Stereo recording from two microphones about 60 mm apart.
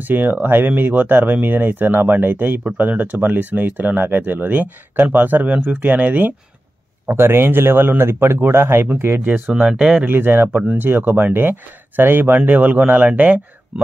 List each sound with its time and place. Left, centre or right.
0.0 s speech: right
7.1 s speech: right
9.5 s speech: centre
10.0 s speech: right